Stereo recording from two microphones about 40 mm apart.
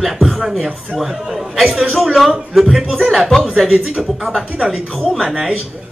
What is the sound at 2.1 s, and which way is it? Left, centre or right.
Speech, centre.